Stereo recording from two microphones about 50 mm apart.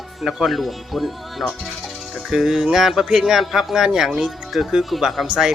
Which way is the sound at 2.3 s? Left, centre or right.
Centre.